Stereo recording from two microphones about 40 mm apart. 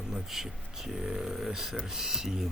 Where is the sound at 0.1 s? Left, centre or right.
Centre.